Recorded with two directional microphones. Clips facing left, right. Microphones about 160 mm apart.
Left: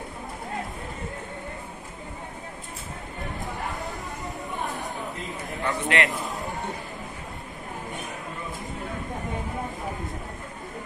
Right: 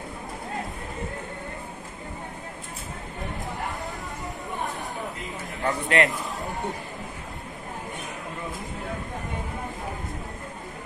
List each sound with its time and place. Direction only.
5.6 s a man's voice: 35° right (ahead or behind)